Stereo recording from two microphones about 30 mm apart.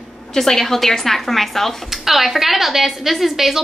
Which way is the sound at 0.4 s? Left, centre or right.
Centre.